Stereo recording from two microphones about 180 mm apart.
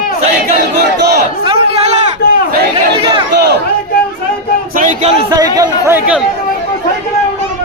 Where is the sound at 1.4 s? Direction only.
30° right (ahead or behind).